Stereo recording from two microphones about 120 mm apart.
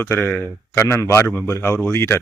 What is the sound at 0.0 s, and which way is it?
A man's voice, 20° left (ahead or behind).